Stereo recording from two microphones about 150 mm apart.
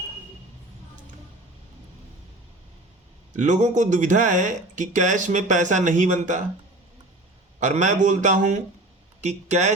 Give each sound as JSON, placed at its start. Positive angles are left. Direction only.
{"t": 3.3, "sound": "speech", "side_deg": -55}
{"t": 7.6, "sound": "speech", "side_deg": -55}